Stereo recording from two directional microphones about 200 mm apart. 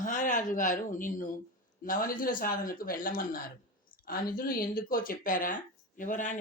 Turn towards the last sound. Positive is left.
turn(degrees=40)  # may be behind; listen again after turning